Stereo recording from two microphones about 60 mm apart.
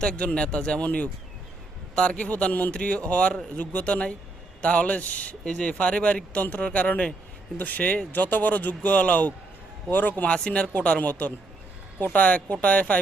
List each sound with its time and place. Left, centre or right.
0.0 s a man's voice: centre; by 10.3 s left
10.3 s speech: centre